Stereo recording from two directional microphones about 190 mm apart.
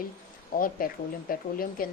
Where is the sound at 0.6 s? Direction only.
50° left (ahead or behind).